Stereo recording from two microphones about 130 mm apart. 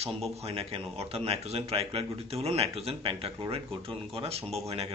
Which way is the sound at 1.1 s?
50° right (ahead or behind).